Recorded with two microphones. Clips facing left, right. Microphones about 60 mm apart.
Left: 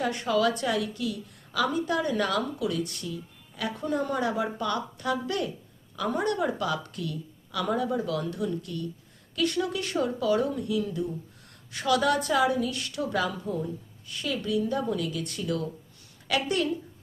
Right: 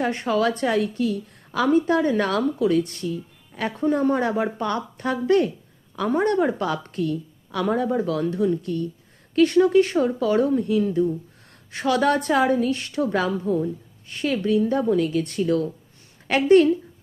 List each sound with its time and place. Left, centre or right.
0.0 s a woman's voice: right